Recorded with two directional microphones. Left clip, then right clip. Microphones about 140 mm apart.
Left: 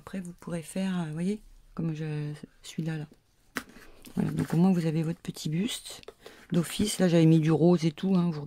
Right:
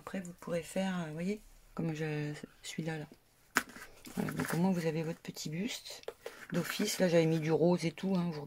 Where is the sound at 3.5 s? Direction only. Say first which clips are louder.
Right 4 dB; 5° right (ahead or behind).